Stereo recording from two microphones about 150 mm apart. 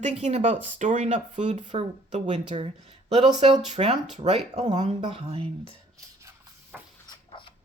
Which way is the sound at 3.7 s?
50° right (ahead or behind).